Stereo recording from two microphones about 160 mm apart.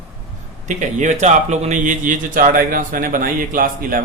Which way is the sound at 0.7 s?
50° right (ahead or behind).